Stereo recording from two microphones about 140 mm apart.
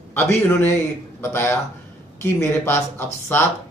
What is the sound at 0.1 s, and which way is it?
A man's voice, 15° left (ahead or behind).